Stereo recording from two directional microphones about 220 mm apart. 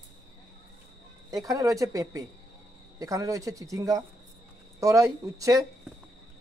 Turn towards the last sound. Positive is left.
turn(degrees=-15)  # may be behind; listen again after turning